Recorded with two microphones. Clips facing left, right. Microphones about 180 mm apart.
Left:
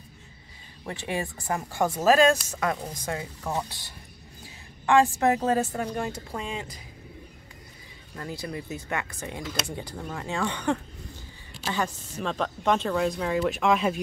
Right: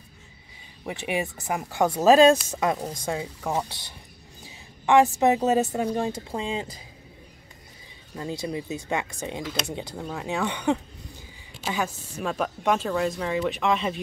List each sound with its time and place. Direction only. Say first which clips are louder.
0.8 s speech: right 3 dB; 15° right (ahead or behind)
2.0 s speech: right 4 dB; 25° right (ahead or behind)
4.8 s a woman's voice: right 2 dB; 20° right (ahead or behind)
8.2 s speech: right 4 dB; 20° right (ahead or behind)
9.9 s speech: right 2 dB; 5° right (ahead or behind)